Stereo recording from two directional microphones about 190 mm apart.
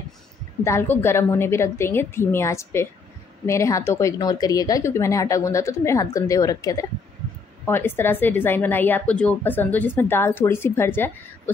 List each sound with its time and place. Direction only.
0.7 s a woman's voice: 15° left (ahead or behind)